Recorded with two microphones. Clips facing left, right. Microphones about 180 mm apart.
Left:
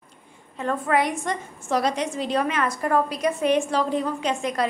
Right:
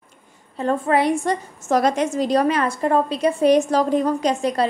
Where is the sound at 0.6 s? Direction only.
30° right (ahead or behind).